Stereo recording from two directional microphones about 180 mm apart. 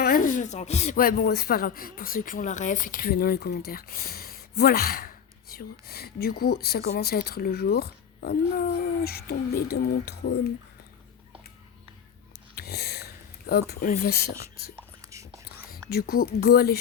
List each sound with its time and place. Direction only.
0.0 s a sound: 55° left (ahead or behind)
0.9 s speech: 55° left (ahead or behind)
12.5 s a sound: 60° left (ahead or behind)
13.5 s speech: 60° left (ahead or behind)
14.8 s whispering: 15° right (ahead or behind)
15.9 s speech: 60° left (ahead or behind)